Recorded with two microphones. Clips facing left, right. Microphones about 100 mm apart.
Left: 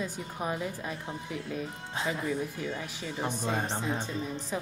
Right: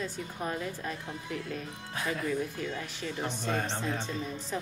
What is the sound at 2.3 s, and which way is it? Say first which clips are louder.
A woman's voice: even; 10° left (ahead or behind).